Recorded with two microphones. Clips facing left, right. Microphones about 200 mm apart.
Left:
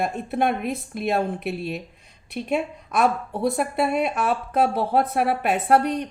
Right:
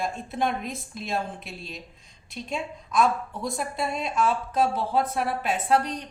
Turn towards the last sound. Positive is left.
turn(degrees=60)  # may be behind; listen again after turning